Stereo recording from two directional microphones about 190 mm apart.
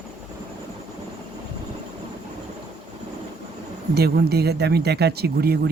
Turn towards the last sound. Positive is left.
turn(degrees=-55)  # may be behind; listen again after turning